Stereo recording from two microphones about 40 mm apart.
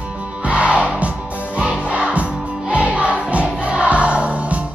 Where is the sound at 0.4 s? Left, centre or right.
Right.